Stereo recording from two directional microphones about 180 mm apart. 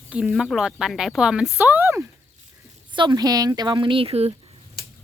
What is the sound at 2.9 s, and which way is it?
Speech, 25° right (ahead or behind).